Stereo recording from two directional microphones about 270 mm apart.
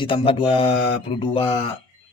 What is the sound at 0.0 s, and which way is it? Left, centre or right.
Speech, centre.